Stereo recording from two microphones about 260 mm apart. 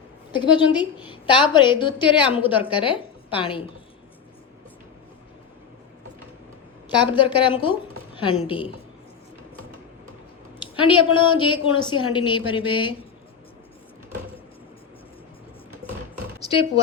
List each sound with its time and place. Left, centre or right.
0.3 s a woman's voice: centre
7.2 s a woman's voice: centre
10.6 s speech: centre
15.8 s music: centre
16.5 s speech: left